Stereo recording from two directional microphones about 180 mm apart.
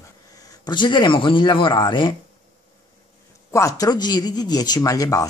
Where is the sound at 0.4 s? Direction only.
20° left (ahead or behind).